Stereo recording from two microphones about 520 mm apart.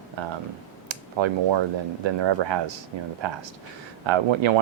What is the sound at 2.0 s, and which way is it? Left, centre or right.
Speech, right.